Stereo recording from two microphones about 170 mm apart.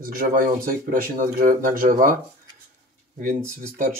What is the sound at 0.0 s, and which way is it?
Speech, 60° right (ahead or behind).